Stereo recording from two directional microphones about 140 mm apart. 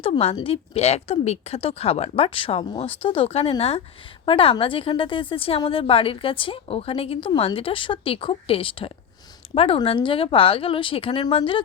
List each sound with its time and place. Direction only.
0.0 s a woman's voice: 45° left (ahead or behind)